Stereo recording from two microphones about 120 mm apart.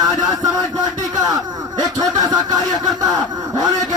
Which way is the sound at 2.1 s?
30° right (ahead or behind).